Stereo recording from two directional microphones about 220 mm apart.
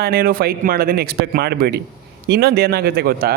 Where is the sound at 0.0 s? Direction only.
45° right (ahead or behind).